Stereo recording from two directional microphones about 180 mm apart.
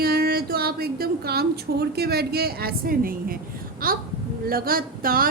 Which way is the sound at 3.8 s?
55° right (ahead or behind).